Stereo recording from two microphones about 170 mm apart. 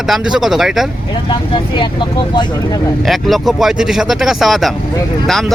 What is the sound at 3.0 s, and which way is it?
Speech, centre (ahead or behind).